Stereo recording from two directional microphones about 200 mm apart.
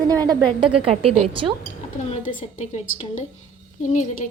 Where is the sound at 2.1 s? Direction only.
40° left (ahead or behind).